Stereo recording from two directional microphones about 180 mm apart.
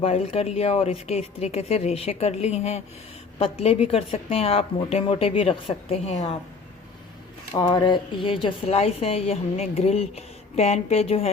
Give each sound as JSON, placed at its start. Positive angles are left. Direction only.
{"t": 0.0, "sound": "speech", "side_deg": 35}
{"t": 7.5, "sound": "speech", "side_deg": 25}